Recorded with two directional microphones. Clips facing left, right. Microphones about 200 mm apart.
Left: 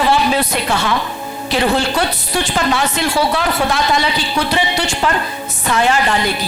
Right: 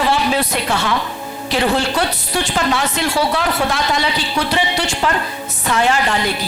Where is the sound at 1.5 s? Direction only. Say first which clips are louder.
Left 1 dB; 10° left (ahead or behind).